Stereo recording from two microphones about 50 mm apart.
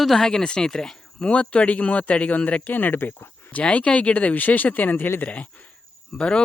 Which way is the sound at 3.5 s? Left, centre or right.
Left.